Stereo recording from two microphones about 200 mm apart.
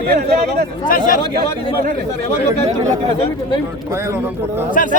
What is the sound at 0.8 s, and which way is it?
Speech, 45° left (ahead or behind).